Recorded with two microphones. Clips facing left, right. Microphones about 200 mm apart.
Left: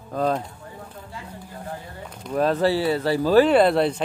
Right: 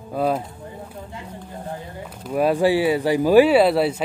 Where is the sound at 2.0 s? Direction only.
5° right (ahead or behind).